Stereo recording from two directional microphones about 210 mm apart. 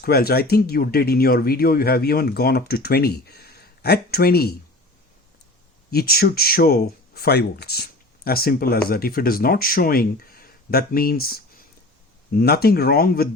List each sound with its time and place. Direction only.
0.0 s speech: 45° left (ahead or behind)
5.9 s speech: 50° left (ahead or behind)